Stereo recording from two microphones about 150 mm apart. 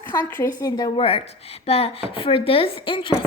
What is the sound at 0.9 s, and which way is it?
A woman's voice, 40° left (ahead or behind).